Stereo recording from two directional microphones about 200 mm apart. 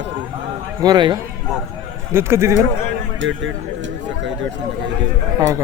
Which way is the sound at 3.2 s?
70° right (ahead or behind).